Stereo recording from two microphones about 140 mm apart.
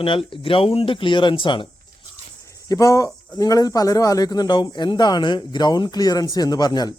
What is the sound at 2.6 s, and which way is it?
Speech, 25° left (ahead or behind).